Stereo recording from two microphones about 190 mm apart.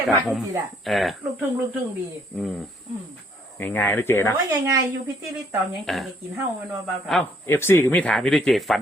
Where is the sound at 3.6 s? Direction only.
10° left (ahead or behind).